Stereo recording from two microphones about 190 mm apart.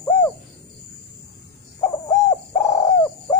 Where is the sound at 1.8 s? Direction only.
15° left (ahead or behind).